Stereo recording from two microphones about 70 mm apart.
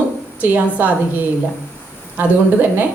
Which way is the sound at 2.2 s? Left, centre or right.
Right.